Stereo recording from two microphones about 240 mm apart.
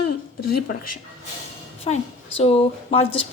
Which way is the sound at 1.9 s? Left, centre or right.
Left.